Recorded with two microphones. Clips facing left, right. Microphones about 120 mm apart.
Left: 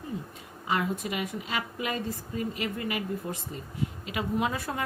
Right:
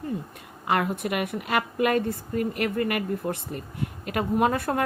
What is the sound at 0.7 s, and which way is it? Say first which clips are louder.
A woman's voice: right 4 dB; 60° right (ahead or behind).